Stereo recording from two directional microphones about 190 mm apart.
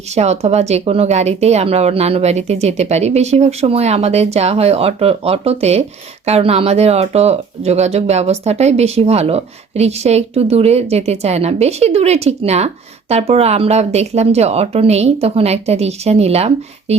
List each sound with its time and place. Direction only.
0.1 s speech: 35° right (ahead or behind)